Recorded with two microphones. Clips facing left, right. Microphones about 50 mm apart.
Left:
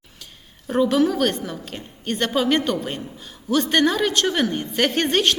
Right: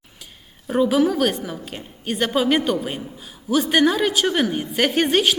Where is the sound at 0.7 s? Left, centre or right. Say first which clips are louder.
Right 1 dB; centre.